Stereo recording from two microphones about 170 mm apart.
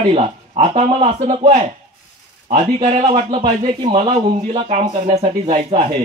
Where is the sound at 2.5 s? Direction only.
35° right (ahead or behind).